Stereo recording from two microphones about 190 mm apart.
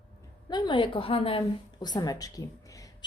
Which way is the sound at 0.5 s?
25° left (ahead or behind).